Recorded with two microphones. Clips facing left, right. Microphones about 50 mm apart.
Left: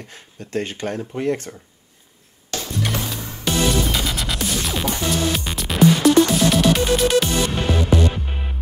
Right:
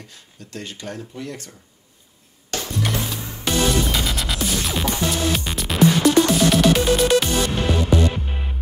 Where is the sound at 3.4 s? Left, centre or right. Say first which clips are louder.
Even; centre.